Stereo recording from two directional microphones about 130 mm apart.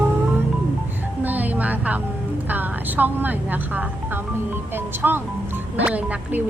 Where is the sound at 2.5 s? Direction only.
15° right (ahead or behind).